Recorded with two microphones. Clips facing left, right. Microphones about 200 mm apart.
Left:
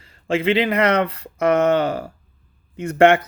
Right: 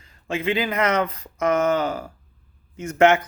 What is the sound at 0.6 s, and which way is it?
Speech, 65° left (ahead or behind).